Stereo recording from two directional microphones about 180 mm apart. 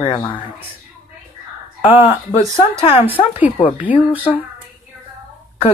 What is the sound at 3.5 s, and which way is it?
Speech, 30° left (ahead or behind).